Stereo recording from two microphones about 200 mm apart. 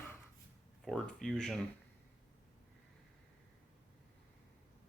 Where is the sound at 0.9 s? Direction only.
Centre (ahead or behind).